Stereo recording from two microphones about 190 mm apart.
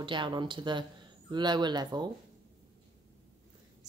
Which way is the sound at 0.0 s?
25° right (ahead or behind).